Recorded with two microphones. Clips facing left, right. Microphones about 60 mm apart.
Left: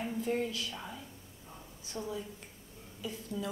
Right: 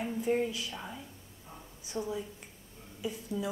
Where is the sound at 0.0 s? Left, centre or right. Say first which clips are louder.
Right 3 dB; centre.